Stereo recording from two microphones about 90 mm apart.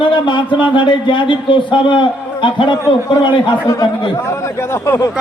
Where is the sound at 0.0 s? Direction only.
60° left (ahead or behind).